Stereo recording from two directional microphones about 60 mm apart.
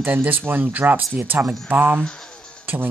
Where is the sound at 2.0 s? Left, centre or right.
Centre.